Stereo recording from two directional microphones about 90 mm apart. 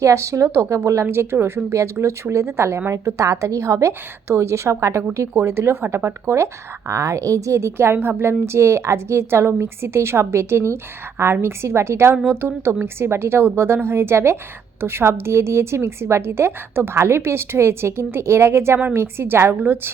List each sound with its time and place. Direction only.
0.0 s speech: 35° right (ahead or behind)